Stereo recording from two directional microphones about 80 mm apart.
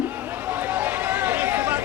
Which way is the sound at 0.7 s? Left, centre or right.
Right.